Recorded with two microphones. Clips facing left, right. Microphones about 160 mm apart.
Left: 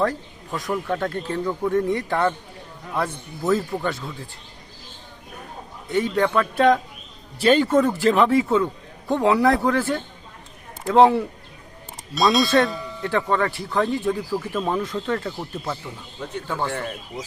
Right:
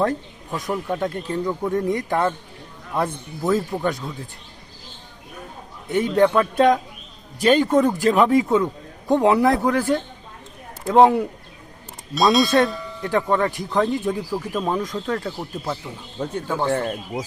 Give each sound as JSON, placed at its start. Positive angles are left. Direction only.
{"t": 0.0, "sound": "speech", "side_deg": -20}
{"t": 5.9, "sound": "speech", "side_deg": -15}
{"t": 12.1, "sound": "speech", "side_deg": 0}
{"t": 13.0, "sound": "speech", "side_deg": -15}
{"t": 16.2, "sound": "speech", "side_deg": -45}